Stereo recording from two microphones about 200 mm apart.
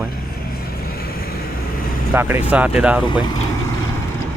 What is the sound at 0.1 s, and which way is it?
Vehicle, 50° left (ahead or behind).